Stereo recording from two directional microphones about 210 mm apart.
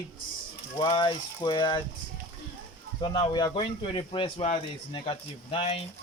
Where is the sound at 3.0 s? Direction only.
20° left (ahead or behind).